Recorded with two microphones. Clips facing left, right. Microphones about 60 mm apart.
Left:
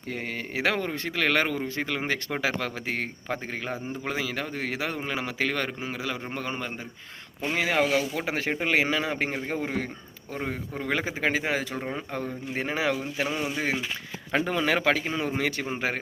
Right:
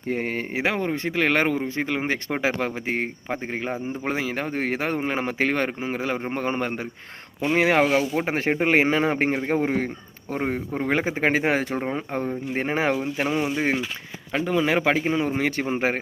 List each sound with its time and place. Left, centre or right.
0.1 s speech: right
0.5 s speech: right
11.8 s speech: centre
12.1 s speech: right
14.3 s speech: centre
14.7 s speech: centre